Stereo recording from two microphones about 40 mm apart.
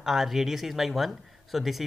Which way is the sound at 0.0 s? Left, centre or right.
Centre.